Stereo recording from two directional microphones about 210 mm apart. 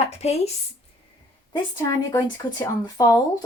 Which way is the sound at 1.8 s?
20° left (ahead or behind).